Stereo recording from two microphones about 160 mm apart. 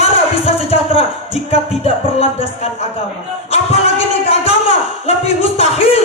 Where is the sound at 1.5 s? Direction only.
35° left (ahead or behind).